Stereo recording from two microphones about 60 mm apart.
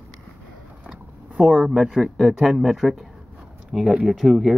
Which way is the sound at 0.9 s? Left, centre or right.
Centre.